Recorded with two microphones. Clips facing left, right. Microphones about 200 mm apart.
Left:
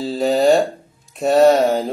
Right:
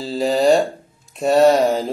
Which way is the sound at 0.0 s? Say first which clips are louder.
Left 1 dB; centre (ahead or behind).